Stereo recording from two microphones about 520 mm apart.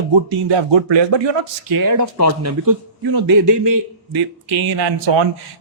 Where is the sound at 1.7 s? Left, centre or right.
Right.